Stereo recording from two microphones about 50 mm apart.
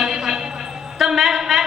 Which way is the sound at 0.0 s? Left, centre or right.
Centre.